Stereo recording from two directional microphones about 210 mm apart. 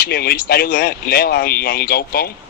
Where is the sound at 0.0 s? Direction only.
50° left (ahead or behind).